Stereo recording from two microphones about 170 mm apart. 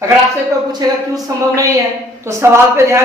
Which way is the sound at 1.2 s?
20° right (ahead or behind).